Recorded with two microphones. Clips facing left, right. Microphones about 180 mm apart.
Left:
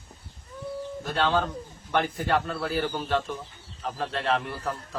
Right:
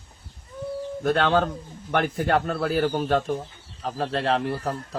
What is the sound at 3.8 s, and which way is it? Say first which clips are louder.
Speech: right 4 dB; 35° right (ahead or behind).